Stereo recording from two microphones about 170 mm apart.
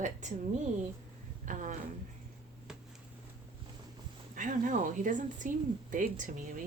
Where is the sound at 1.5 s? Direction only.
50° right (ahead or behind).